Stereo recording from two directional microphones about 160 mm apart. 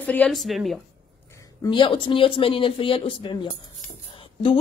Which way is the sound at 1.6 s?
30° left (ahead or behind).